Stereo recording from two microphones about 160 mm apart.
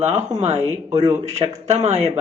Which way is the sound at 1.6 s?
40° right (ahead or behind).